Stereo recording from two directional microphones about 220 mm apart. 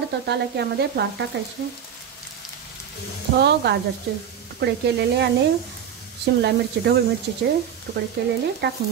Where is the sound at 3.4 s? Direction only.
50° right (ahead or behind).